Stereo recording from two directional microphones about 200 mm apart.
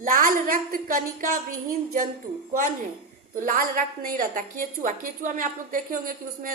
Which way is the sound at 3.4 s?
45° right (ahead or behind).